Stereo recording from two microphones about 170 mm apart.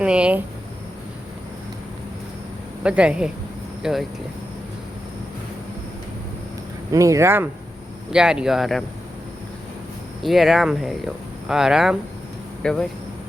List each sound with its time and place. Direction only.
0.0 s speech: 5° right (ahead or behind)
2.8 s speech: 5° right (ahead or behind)
6.9 s speech: 20° right (ahead or behind)
8.1 s speech: 5° right (ahead or behind)
10.2 s speech: centre (ahead or behind)